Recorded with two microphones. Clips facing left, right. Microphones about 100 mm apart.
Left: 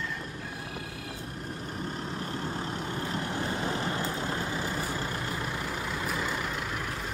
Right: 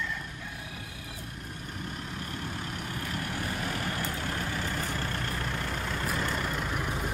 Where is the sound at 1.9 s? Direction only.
30° left (ahead or behind); by 7.0 s 5° right (ahead or behind).